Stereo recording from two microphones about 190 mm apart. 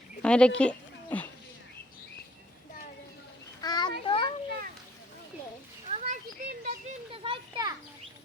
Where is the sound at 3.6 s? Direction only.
20° left (ahead or behind).